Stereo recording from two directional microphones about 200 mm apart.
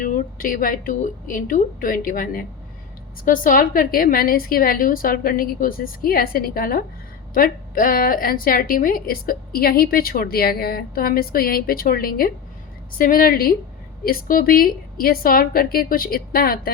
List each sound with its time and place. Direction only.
0.0 s a woman's voice: 45° left (ahead or behind)